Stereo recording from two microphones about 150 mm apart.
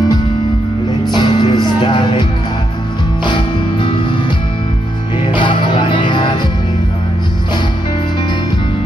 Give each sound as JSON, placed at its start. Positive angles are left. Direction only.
{"t": 1.1, "sound": "music", "side_deg": 30}
{"t": 3.3, "sound": "music", "side_deg": 35}
{"t": 5.2, "sound": "music", "side_deg": 35}